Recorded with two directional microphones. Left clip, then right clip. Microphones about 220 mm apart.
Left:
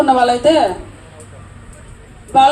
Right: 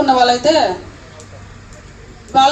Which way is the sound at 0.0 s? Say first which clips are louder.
Even; 50° left (ahead or behind).